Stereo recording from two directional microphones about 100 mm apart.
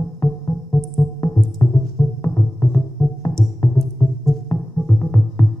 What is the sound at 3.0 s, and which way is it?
Music, 20° left (ahead or behind).